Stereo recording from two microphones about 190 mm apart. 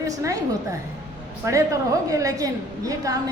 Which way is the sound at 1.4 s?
15° right (ahead or behind).